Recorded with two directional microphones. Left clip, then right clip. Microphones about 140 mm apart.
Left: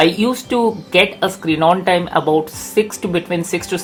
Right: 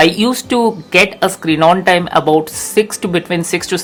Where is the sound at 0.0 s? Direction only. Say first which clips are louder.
Right 3 dB; 35° right (ahead or behind).